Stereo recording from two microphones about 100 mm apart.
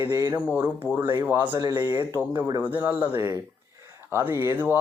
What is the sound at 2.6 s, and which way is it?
Speech, 20° right (ahead or behind).